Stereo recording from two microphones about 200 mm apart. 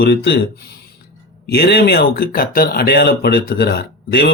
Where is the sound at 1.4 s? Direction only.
50° left (ahead or behind).